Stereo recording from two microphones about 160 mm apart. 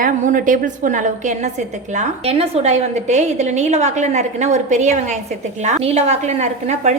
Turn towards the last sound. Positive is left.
turn(degrees=-45)  # may be behind; listen again after turning